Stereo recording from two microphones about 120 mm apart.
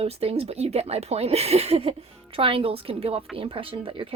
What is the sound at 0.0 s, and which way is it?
A woman's voice, 55° right (ahead or behind).